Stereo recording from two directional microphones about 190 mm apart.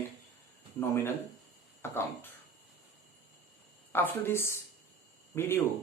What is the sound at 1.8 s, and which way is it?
Speech, 10° left (ahead or behind).